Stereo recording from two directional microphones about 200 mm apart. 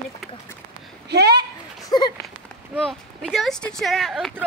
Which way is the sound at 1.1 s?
55° right (ahead or behind).